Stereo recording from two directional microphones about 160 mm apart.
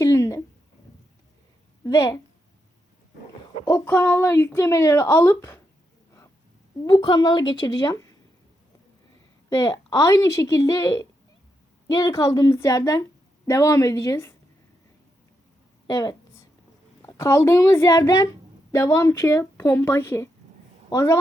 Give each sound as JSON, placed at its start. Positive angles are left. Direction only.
{"t": 0.0, "sound": "a sound", "side_deg": 20}
{"t": 1.8, "sound": "a woman's voice", "side_deg": 20}
{"t": 3.7, "sound": "a woman's voice", "side_deg": 15}
{"t": 6.8, "sound": "a woman's voice", "side_deg": 25}
{"t": 9.5, "sound": "a woman's voice", "side_deg": 20}
{"t": 15.9, "sound": "a woman's voice", "side_deg": 25}